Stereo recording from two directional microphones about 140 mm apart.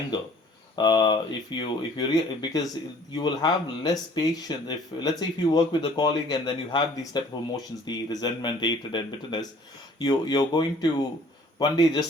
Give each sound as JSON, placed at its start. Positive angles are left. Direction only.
{"t": 0.8, "sound": "speech", "side_deg": 30}